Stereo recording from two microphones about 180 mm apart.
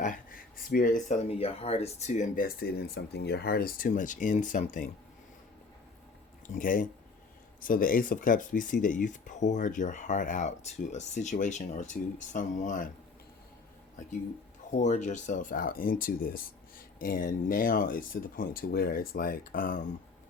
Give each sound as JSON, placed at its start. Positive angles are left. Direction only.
{"t": 0.0, "sound": "speech", "side_deg": 50}
{"t": 6.5, "sound": "speech", "side_deg": 50}
{"t": 14.8, "sound": "speech", "side_deg": 40}